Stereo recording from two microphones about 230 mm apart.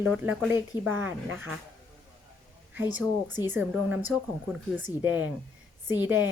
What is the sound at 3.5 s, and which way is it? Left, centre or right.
Speech, centre.